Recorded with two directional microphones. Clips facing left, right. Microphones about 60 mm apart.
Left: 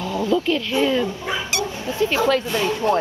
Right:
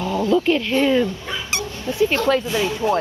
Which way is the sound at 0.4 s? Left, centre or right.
Right.